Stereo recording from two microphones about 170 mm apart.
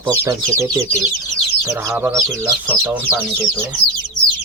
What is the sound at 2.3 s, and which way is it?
Speech, 10° left (ahead or behind).